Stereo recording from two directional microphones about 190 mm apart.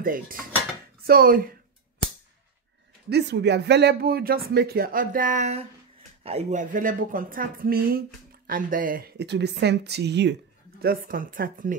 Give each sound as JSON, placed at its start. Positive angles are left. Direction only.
{"t": 0.0, "sound": "a woman's voice", "side_deg": -45}
{"t": 3.1, "sound": "a woman's voice", "side_deg": -60}
{"t": 10.8, "sound": "a woman's voice", "side_deg": -50}